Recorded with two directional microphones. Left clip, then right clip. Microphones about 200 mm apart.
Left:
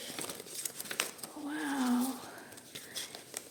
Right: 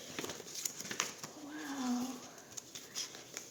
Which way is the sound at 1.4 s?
50° left (ahead or behind).